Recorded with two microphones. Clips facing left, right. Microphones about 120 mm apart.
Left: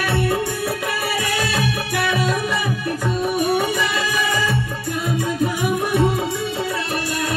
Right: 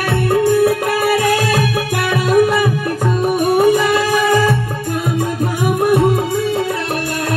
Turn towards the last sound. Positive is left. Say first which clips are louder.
# right 6 dB
turn(degrees=-50)  # may be behind; listen again after turning